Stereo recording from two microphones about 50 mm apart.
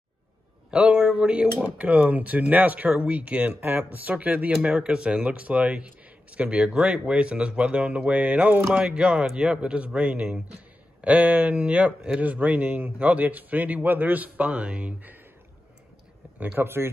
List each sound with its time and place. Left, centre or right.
0.7 s speech: centre
4.6 s speech: centre
16.3 s speech: right